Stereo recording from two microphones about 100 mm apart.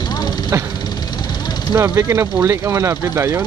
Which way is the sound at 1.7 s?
30° right (ahead or behind).